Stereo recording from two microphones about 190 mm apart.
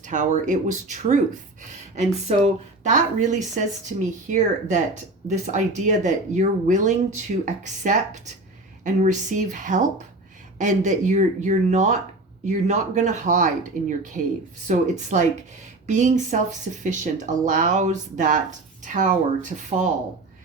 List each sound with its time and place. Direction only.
0.0 s speech: 40° right (ahead or behind)